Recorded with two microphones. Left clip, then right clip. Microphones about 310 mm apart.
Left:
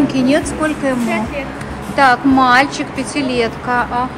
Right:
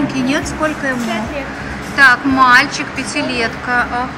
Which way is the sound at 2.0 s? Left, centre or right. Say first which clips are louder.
Right 2 dB; centre.